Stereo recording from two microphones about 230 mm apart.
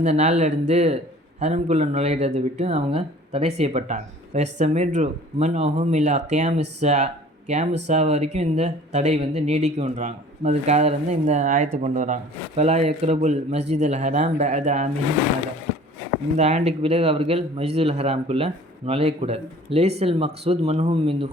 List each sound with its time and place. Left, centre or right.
0.0 s speech: right
16.4 s speech: right